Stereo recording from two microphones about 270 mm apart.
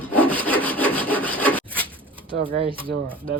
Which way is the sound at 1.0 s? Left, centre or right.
Centre.